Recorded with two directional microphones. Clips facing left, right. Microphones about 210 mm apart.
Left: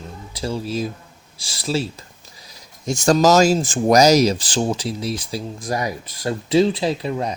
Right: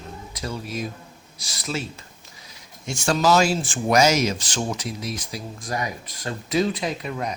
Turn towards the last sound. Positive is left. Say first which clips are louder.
# left 6 dB
turn(degrees=30)  # may be behind; listen again after turning